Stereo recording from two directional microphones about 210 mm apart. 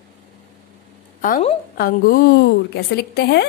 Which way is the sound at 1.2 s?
40° left (ahead or behind).